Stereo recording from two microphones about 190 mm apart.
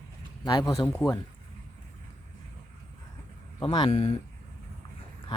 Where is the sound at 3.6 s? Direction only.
25° left (ahead or behind).